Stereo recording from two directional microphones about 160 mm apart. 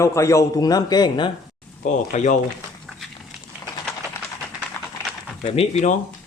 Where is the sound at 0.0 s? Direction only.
20° left (ahead or behind).